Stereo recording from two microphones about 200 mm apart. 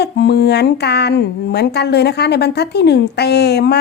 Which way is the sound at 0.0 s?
55° left (ahead or behind).